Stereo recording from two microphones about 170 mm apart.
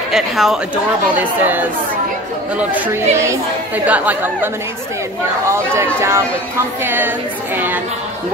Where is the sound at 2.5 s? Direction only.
10° right (ahead or behind).